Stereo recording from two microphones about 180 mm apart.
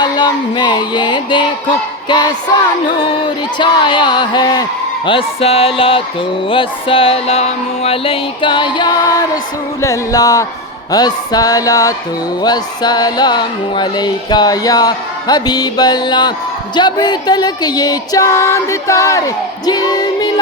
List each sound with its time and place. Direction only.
0.0 s speech: 25° left (ahead or behind)